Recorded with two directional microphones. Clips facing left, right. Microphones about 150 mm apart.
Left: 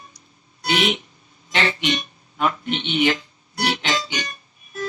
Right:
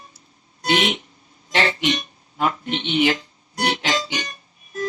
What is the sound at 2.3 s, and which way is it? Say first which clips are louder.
Music: even; 40° right (ahead or behind).